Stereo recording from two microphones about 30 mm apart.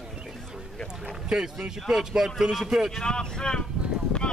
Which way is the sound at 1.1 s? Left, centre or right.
Right.